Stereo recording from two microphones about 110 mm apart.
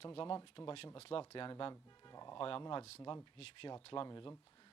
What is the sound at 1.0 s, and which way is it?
Speech, 60° left (ahead or behind).